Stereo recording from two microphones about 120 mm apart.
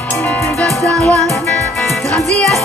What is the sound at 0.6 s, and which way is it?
Music, 10° left (ahead or behind).